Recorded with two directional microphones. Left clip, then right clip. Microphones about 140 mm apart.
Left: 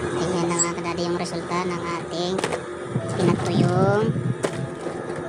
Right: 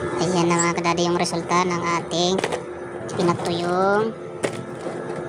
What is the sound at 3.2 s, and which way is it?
Speech, 20° right (ahead or behind).